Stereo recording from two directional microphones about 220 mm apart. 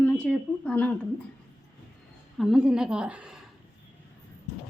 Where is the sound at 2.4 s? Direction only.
Centre (ahead or behind).